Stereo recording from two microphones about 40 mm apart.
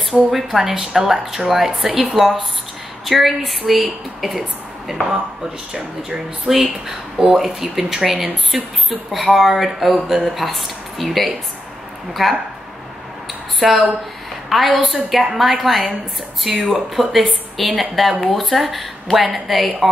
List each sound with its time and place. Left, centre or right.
0.1 s a woman's voice: centre
5.8 s a woman's voice: centre
13.6 s a woman's voice: centre
16.5 s a woman's voice: centre
16.9 s a woman's voice: centre